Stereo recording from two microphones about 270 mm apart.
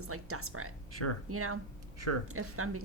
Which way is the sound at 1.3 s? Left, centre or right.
Right.